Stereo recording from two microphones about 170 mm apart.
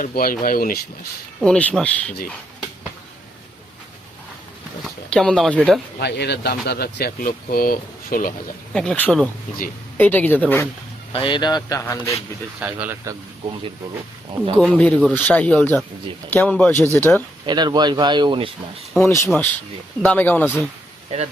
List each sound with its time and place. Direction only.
0.0 s speech: 60° left (ahead or behind)
1.4 s speech: 5° left (ahead or behind)
5.1 s speech: 5° left (ahead or behind)
6.0 s speech: 80° left; by 8.5 s 55° left (ahead or behind)
8.7 s speech: 5° left (ahead or behind)
11.1 s speech: 30° left (ahead or behind)
12.5 s speech: 10° right (ahead or behind)
14.6 s speech: 5° left (ahead or behind)
17.4 s speech: 25° right (ahead or behind)
18.9 s speech: 15° left (ahead or behind)